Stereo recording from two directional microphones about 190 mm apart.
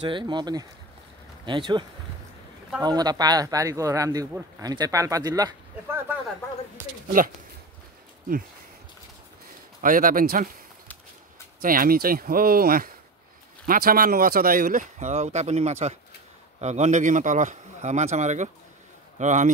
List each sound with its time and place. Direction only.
0.0 s speech: 25° right (ahead or behind)
6.8 s speech: 15° right (ahead or behind)
9.8 s speech: 45° right (ahead or behind)
11.6 s a man's voice: 50° right (ahead or behind)